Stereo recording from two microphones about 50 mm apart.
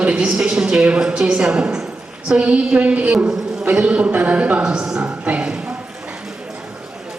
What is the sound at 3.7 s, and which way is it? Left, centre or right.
A woman's voice, right.